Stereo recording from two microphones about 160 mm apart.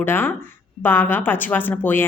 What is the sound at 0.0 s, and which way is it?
A woman's voice, 15° left (ahead or behind).